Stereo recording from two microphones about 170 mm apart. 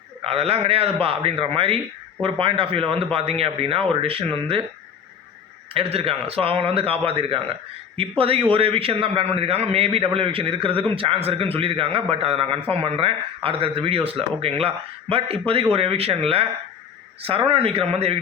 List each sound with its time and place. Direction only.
0.2 s a man's voice: 35° right (ahead or behind)
5.7 s a man's voice: 35° right (ahead or behind)